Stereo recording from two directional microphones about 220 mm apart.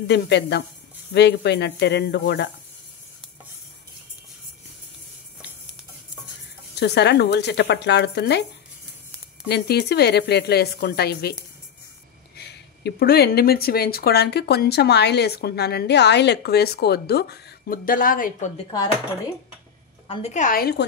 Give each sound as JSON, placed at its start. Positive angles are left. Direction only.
{"t": 0.1, "sound": "speech", "side_deg": 50}
{"t": 6.7, "sound": "speech", "side_deg": 50}
{"t": 9.5, "sound": "speech", "side_deg": 45}
{"t": 12.4, "sound": "speech", "side_deg": 50}
{"t": 20.1, "sound": "a woman's voice", "side_deg": 30}